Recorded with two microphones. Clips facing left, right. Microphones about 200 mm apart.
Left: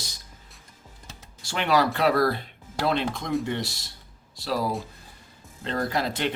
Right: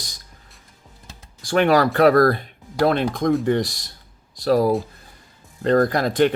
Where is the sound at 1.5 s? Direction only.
50° right (ahead or behind).